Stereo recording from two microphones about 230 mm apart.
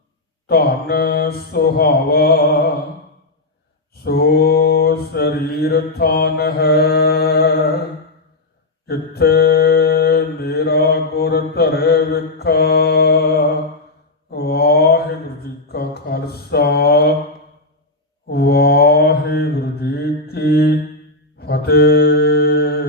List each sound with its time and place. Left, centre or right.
0.4 s mantra: left
4.0 s mantra: left
8.9 s mantra: left
15.7 s a sound: left
18.3 s mantra: left
21.3 s music: left